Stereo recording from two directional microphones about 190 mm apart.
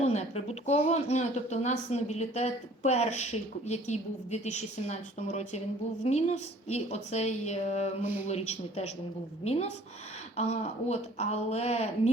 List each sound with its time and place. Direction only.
0.0 s speech: 35° left (ahead or behind)